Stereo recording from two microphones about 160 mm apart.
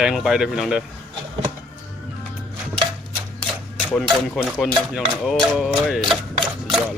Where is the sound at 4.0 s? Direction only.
Centre (ahead or behind).